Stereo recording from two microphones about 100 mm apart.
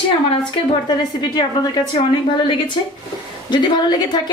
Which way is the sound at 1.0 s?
45° left (ahead or behind).